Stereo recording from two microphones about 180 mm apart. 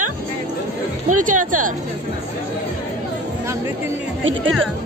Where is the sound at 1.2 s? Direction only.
50° right (ahead or behind).